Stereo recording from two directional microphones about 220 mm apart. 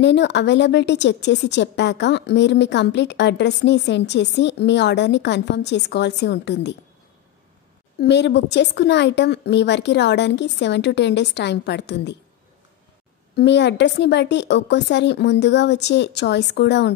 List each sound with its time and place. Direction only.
0.0 s a woman's voice: 50° left (ahead or behind)
8.0 s a woman's voice: 50° left (ahead or behind)
13.4 s a woman's voice: 50° left (ahead or behind)